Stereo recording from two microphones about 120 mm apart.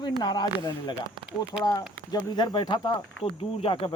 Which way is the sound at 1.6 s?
35° left (ahead or behind).